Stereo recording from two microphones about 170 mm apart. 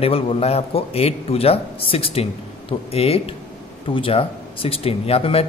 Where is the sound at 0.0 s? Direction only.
35° left (ahead or behind).